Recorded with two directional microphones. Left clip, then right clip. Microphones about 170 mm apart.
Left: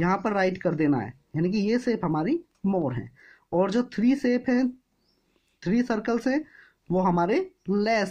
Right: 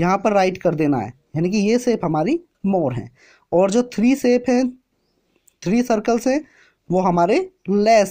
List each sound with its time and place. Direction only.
0.0 s speech: 30° right (ahead or behind)